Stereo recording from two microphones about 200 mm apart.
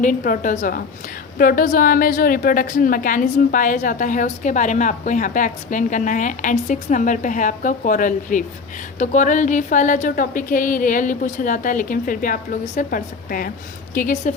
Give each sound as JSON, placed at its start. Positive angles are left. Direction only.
{"t": 0.0, "sound": "a woman's voice", "side_deg": 40}